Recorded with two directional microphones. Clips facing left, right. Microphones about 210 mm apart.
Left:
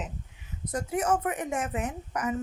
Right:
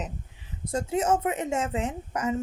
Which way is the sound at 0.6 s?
25° right (ahead or behind).